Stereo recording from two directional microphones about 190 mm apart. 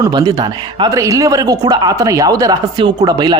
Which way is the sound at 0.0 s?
20° right (ahead or behind).